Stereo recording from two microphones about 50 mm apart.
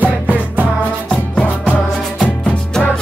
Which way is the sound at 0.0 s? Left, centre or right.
Right.